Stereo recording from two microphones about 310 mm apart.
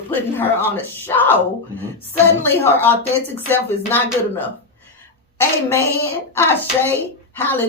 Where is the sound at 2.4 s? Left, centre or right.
Centre.